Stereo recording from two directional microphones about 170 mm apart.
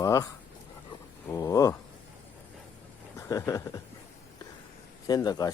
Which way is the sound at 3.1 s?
20° left (ahead or behind).